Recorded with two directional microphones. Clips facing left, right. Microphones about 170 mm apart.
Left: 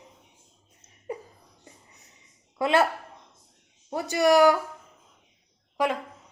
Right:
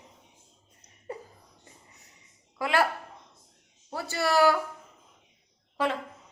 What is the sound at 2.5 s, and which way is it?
Speech, 20° left (ahead or behind).